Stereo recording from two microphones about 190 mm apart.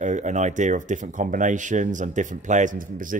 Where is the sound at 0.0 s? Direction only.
40° right (ahead or behind).